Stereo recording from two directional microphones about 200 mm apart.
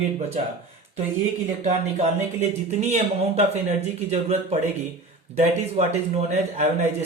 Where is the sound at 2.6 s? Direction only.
30° right (ahead or behind).